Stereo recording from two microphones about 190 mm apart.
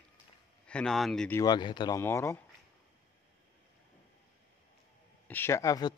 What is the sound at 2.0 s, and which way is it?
Speech, 15° left (ahead or behind).